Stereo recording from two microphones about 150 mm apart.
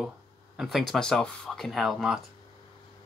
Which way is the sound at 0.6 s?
Centre (ahead or behind).